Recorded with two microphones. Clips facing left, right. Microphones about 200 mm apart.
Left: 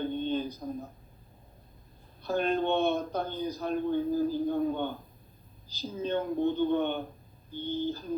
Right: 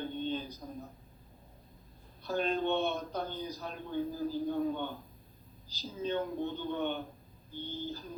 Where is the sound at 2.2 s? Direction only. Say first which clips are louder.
Left 4 dB; 55° left (ahead or behind).